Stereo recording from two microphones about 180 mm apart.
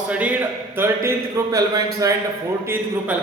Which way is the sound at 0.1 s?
10° right (ahead or behind).